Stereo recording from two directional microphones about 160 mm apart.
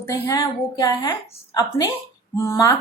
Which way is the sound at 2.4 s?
20° left (ahead or behind).